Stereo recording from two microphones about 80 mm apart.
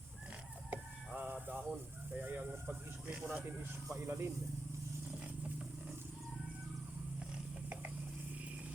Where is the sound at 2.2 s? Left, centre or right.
Right.